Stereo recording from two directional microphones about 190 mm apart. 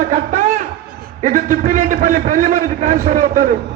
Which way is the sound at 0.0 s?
40° right (ahead or behind).